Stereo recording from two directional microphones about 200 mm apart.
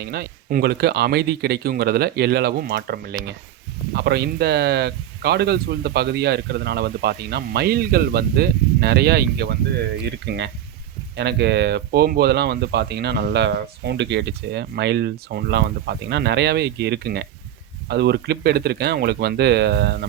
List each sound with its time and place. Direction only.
0.0 s speech: 50° right (ahead or behind)